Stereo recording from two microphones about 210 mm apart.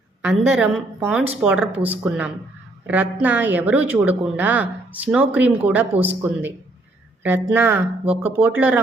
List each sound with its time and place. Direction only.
0.2 s a woman's voice: 5° right (ahead or behind)